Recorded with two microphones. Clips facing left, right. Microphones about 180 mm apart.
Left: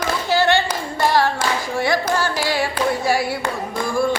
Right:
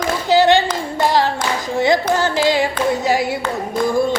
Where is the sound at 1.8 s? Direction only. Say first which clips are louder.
Right 5 dB; 20° right (ahead or behind).